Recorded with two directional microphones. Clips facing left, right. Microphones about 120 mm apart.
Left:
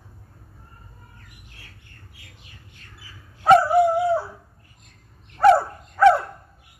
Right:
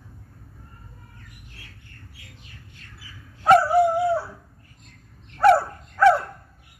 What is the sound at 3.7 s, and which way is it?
Dog, 15° left (ahead or behind).